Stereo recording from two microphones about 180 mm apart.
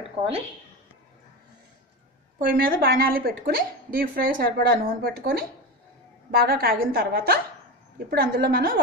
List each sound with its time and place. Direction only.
2.4 s a woman's voice: 55° right (ahead or behind)